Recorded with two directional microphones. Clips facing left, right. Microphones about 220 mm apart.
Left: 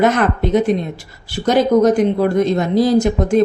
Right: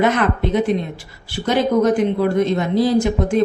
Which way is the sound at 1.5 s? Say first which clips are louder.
Left 3 dB; 40° left (ahead or behind).